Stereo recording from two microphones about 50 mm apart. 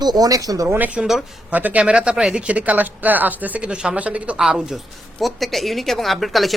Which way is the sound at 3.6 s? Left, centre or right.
Centre.